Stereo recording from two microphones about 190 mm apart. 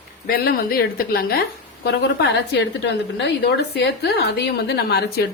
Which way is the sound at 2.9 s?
65° left (ahead or behind).